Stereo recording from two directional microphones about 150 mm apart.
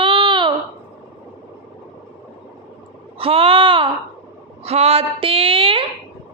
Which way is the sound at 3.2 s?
40° right (ahead or behind).